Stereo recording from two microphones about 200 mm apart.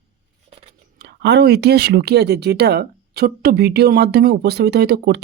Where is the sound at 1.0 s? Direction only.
55° right (ahead or behind).